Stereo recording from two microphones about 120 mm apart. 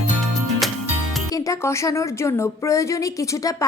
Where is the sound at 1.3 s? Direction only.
30° left (ahead or behind).